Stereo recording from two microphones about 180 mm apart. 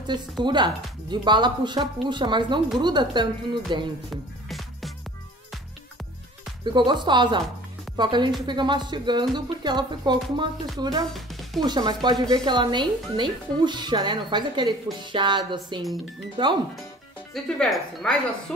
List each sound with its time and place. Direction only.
0.0 s a woman's voice: 25° right (ahead or behind)
6.6 s a woman's voice: 25° right (ahead or behind)
17.3 s speech: 5° left (ahead or behind)